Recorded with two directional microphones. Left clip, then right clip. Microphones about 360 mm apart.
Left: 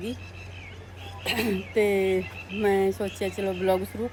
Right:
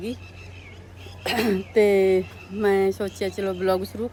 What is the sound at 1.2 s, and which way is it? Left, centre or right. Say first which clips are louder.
Speech: right 4 dB; centre.